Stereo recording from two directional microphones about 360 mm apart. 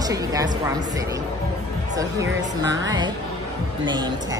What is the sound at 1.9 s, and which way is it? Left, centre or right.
Speech, centre.